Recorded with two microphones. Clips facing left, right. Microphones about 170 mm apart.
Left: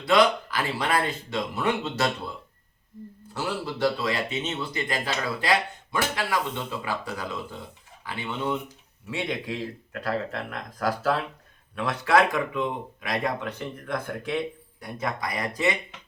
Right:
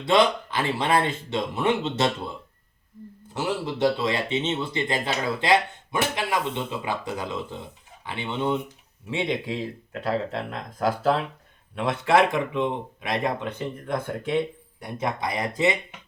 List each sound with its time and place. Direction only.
0.0 s speech: 25° right (ahead or behind)
3.3 s speech: 20° right (ahead or behind)